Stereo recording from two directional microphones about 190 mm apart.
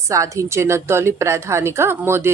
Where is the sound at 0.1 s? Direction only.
15° right (ahead or behind).